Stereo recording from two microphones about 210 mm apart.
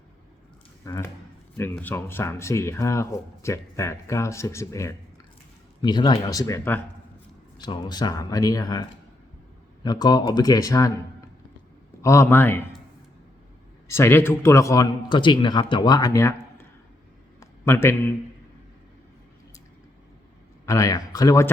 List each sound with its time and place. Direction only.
0.9 s speech: 15° left (ahead or behind)
12.0 s speech: 15° left (ahead or behind)
13.8 s a man's voice: 10° left (ahead or behind)
20.7 s speech: 15° left (ahead or behind)